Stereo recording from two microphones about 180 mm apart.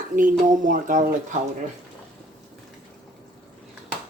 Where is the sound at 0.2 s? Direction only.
45° right (ahead or behind).